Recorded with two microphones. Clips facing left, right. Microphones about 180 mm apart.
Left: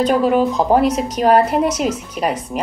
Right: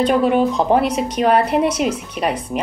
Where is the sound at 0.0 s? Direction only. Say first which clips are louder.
Even; centre (ahead or behind).